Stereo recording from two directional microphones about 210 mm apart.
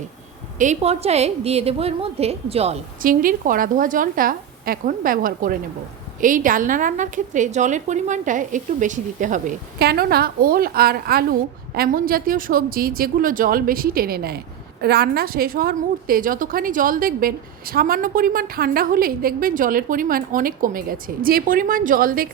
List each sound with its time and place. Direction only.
0.6 s a woman's voice: 30° right (ahead or behind)
3.0 s a woman's voice: 40° right (ahead or behind)